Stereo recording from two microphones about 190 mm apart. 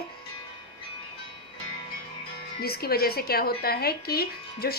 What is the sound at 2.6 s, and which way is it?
A woman's voice, 55° left (ahead or behind).